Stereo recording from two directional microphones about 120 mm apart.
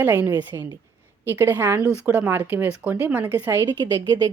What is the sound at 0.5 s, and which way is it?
Speech, 35° right (ahead or behind).